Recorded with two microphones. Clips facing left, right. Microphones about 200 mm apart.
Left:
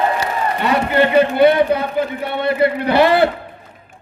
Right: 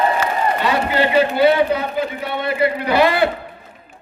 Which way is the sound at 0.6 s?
55° left (ahead or behind).